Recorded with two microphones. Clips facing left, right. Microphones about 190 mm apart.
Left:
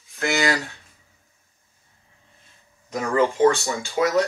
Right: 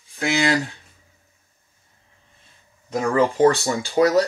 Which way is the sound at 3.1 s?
35° right (ahead or behind).